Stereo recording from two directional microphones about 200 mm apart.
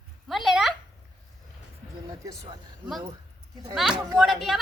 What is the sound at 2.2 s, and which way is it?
Speech, 15° right (ahead or behind).